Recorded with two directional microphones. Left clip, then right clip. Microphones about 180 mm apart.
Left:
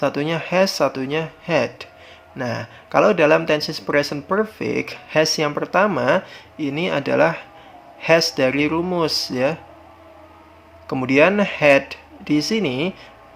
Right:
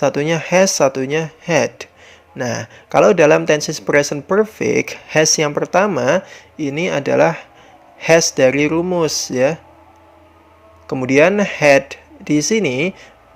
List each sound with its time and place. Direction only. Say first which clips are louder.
0.0 s a man's voice: right 5 dB; 30° right (ahead or behind)
10.8 s a man's voice: right 3 dB; 25° right (ahead or behind)